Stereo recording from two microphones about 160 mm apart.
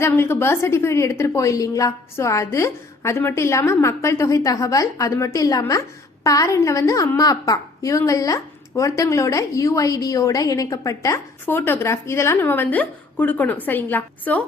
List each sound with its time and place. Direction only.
0.0 s a woman's voice: 15° left (ahead or behind)